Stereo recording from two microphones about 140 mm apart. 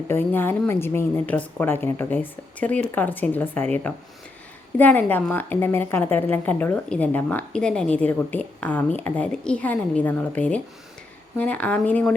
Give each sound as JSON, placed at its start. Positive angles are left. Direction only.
{"t": 0.1, "sound": "speech", "side_deg": 15}